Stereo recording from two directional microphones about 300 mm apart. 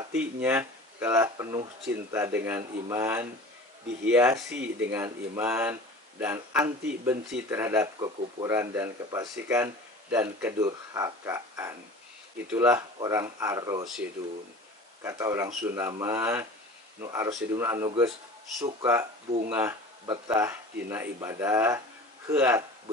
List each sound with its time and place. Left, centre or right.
0.1 s speech: centre
4.5 s speech: right
4.9 s speech: centre
15.0 s speech: centre